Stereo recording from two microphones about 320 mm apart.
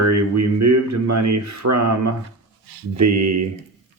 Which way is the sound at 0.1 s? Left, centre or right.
Right.